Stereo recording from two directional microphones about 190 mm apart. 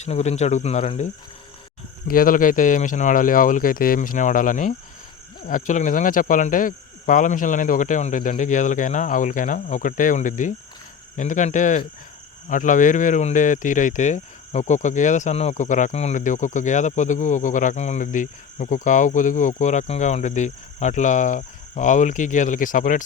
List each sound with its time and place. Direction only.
0.0 s speech: 35° left (ahead or behind)
2.0 s cricket: 50° left (ahead or behind)
11.2 s speech: 40° left (ahead or behind)